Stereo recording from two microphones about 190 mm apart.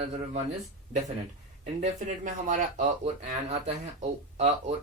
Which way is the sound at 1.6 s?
40° right (ahead or behind).